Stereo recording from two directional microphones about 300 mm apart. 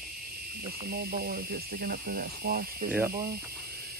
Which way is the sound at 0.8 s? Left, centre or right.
Right.